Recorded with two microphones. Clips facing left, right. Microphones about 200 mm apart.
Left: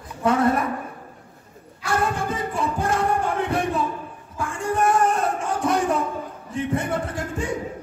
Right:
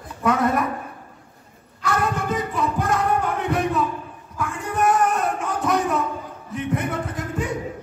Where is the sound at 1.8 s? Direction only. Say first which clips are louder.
Even; 30° left (ahead or behind).